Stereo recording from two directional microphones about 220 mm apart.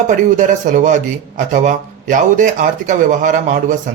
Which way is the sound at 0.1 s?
35° right (ahead or behind).